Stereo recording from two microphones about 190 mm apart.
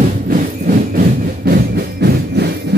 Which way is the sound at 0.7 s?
50° right (ahead or behind).